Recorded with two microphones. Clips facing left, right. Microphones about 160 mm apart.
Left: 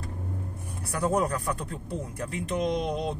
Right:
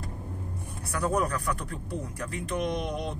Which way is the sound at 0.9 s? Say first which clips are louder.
Left 2 dB; 20° left (ahead or behind).